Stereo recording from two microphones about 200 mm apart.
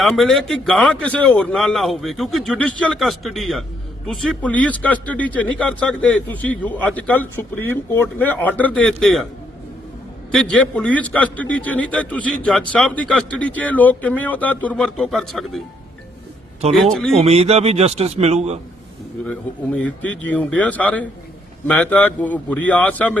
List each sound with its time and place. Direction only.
0.0 s a man's voice: centre (ahead or behind)
10.3 s a man's voice: 5° left (ahead or behind)
16.7 s a man's voice: centre (ahead or behind)
17.2 s a man's voice: 30° right (ahead or behind)
19.2 s a man's voice: 5° left (ahead or behind)